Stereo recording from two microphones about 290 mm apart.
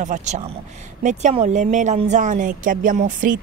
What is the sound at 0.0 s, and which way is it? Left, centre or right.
A woman's voice, right.